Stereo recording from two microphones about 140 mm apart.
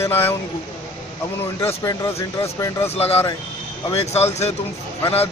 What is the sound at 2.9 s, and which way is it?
Speech, 45° left (ahead or behind).